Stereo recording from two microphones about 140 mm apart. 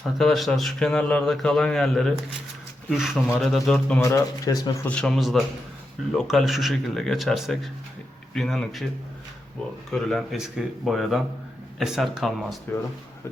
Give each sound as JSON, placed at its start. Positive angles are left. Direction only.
{"t": 0.0, "sound": "speech", "side_deg": 0}
{"t": 4.0, "sound": "speech", "side_deg": 25}
{"t": 4.9, "sound": "speech", "side_deg": 5}
{"t": 9.9, "sound": "speech", "side_deg": 0}